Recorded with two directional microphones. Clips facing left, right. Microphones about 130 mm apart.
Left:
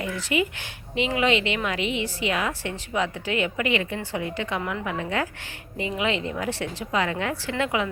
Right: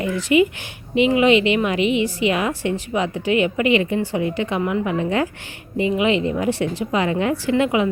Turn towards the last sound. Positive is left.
turn(degrees=-15)  # may be behind; listen again after turning